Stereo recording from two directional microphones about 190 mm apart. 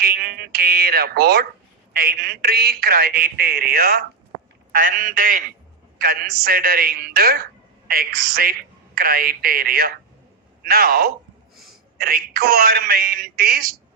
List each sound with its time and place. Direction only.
0.0 s speech: 50° right (ahead or behind)